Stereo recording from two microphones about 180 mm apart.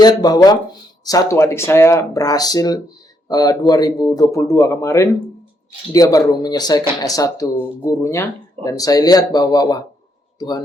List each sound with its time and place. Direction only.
0.0 s speech: 20° left (ahead or behind)